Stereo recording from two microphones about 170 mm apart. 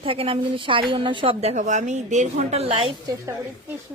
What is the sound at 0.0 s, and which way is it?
A woman's voice, 35° right (ahead or behind).